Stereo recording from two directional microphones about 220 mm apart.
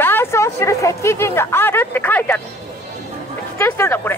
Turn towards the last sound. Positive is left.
turn(degrees=10)  # may be behind; listen again after turning